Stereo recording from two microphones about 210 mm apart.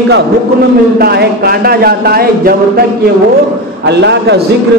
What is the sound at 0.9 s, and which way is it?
A man's voice, 50° right (ahead or behind).